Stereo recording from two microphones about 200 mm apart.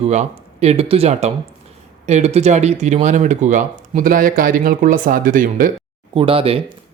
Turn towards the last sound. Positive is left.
turn(degrees=-25)  # may be behind; listen again after turning